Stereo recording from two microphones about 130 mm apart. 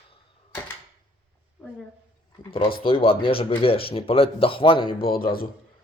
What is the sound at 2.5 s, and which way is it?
Speech, 45° left (ahead or behind).